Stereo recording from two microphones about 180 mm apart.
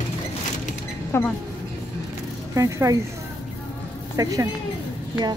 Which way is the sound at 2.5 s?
15° right (ahead or behind).